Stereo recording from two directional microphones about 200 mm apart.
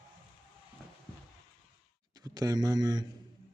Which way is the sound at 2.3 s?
20° right (ahead or behind).